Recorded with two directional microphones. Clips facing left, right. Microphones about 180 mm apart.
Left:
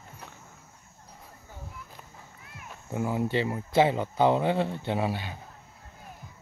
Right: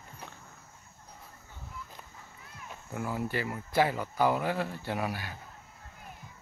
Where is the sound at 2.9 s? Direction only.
20° left (ahead or behind).